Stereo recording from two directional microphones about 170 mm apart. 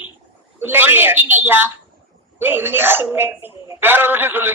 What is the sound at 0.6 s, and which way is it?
A man's voice, 10° right (ahead or behind).